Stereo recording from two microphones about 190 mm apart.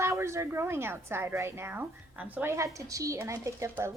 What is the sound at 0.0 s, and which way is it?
A woman's voice, 15° right (ahead or behind).